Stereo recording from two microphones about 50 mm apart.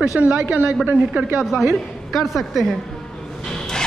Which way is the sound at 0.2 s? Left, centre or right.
Right.